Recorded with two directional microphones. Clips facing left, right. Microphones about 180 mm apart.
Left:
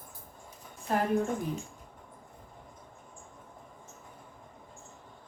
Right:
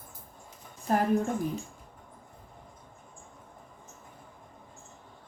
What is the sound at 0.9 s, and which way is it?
Speech, 45° right (ahead or behind).